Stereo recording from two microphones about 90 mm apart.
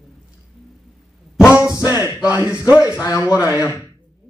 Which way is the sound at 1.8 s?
20° right (ahead or behind).